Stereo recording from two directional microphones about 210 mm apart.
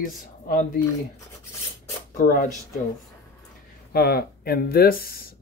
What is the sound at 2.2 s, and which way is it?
Speech, 40° left (ahead or behind).